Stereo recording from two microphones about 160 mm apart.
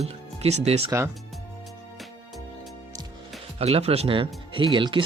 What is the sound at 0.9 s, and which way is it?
Speech, 15° right (ahead or behind).